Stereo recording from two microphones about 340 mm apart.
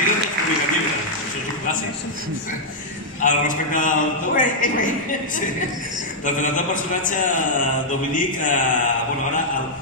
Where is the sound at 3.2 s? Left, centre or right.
Left.